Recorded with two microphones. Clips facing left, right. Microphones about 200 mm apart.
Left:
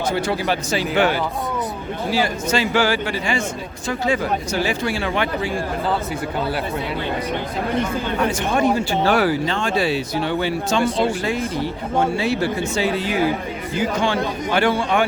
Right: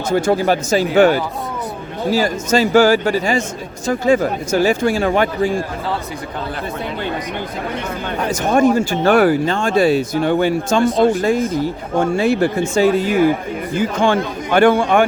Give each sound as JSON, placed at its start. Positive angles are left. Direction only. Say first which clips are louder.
{"t": 0.1, "sound": "speech", "louder": "right 9 dB", "side_deg": -45}
{"t": 8.3, "sound": "speech", "louder": "right 8 dB", "side_deg": -45}